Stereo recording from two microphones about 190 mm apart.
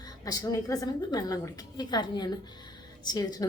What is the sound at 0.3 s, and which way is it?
A woman's voice, 20° left (ahead or behind).